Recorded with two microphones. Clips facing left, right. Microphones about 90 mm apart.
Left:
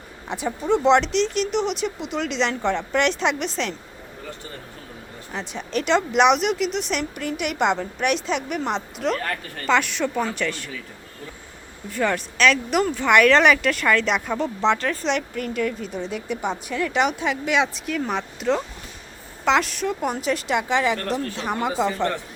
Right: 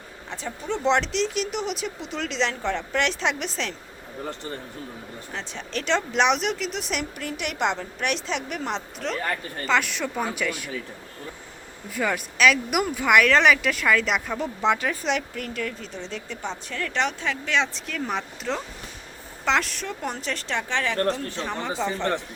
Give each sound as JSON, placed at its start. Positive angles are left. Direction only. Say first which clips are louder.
{"t": 0.3, "sound": "speech", "louder": "left 8 dB", "side_deg": 15}
{"t": 5.3, "sound": "speech", "louder": "left 6 dB", "side_deg": 5}
{"t": 11.9, "sound": "speech", "louder": "left 3 dB", "side_deg": -5}